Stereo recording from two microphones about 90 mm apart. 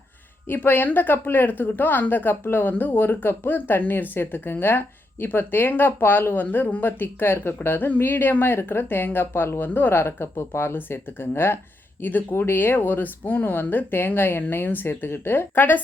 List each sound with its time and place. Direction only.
0.4 s a woman's voice: 25° left (ahead or behind)